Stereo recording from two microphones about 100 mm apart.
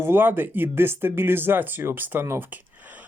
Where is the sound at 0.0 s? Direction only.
20° right (ahead or behind).